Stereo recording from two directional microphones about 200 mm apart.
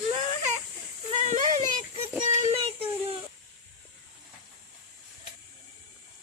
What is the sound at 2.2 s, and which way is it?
Child singing, 35° right (ahead or behind).